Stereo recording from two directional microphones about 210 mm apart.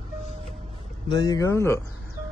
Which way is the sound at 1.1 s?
15° left (ahead or behind).